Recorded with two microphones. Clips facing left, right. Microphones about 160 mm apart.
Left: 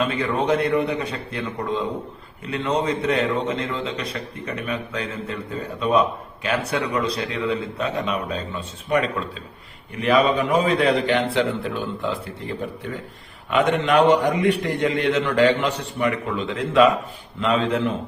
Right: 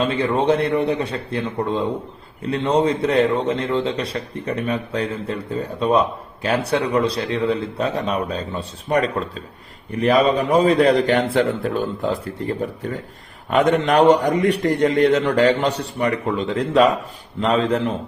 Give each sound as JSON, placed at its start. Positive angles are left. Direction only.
{"t": 0.0, "sound": "a man's voice", "side_deg": -30}